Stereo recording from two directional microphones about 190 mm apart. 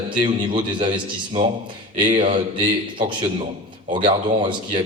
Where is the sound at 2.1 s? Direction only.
25° right (ahead or behind).